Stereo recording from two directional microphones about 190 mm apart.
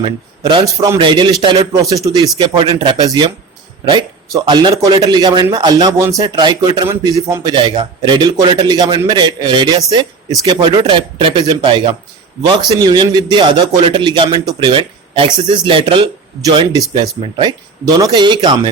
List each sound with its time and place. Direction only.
0.0 s a man's voice: 25° right (ahead or behind)